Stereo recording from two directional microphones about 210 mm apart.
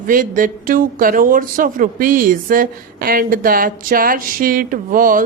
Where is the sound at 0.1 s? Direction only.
40° right (ahead or behind).